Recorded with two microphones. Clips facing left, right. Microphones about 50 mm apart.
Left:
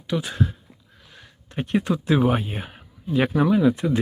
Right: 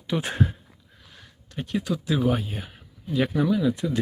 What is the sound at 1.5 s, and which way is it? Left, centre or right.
Speech, left.